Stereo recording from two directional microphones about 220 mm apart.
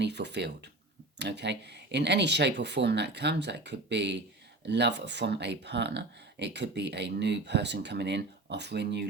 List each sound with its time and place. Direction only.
0.0 s speech: 50° right (ahead or behind)